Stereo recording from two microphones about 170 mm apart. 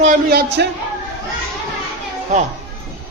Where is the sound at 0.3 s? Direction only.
70° right (ahead or behind).